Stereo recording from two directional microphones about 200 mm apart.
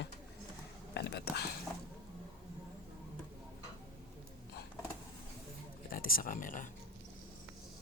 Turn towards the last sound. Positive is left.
turn(degrees=40)  # may be behind; listen again after turning